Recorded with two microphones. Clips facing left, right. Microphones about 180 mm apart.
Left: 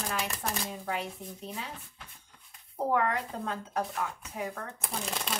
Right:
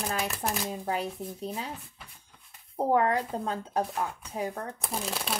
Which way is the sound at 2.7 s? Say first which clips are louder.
Right 4 dB; 35° right (ahead or behind).